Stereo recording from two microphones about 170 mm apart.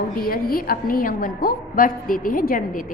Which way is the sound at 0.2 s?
60° left (ahead or behind).